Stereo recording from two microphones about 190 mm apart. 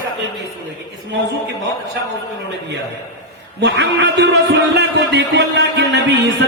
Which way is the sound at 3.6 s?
65° right (ahead or behind).